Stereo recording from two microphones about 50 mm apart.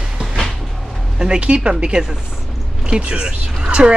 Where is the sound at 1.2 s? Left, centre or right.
Centre.